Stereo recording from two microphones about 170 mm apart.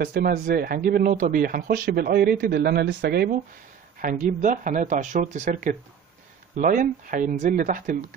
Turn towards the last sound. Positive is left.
turn(degrees=-50)  # may be behind; listen again after turning